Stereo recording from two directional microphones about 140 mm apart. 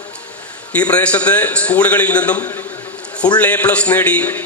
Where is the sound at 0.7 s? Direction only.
10° left (ahead or behind).